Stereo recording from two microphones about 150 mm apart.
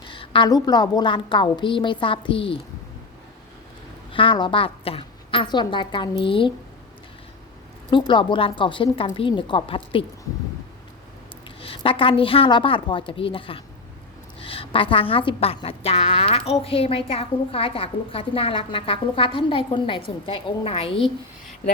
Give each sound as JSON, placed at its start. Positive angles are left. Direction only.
{"t": 0.0, "sound": "a woman's voice", "side_deg": 35}
{"t": 4.1, "sound": "a woman's voice", "side_deg": 35}
{"t": 7.9, "sound": "a woman's voice", "side_deg": 30}
{"t": 11.4, "sound": "a woman's voice", "side_deg": 35}